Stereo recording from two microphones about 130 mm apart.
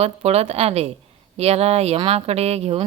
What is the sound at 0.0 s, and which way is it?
Speech, 55° right (ahead or behind).